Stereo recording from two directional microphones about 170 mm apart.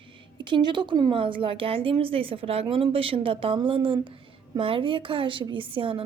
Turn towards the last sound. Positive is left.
turn(degrees=-30)  # may be behind; listen again after turning